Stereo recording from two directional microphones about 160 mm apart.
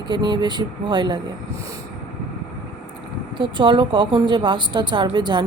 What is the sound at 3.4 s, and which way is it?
Speech, 30° right (ahead or behind).